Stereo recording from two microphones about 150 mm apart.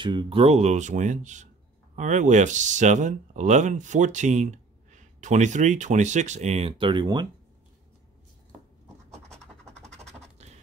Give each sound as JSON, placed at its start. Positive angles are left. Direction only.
{"t": 0.0, "sound": "speech", "side_deg": -30}
{"t": 9.1, "sound": "scratch", "side_deg": 5}
{"t": 9.9, "sound": "a sound", "side_deg": -45}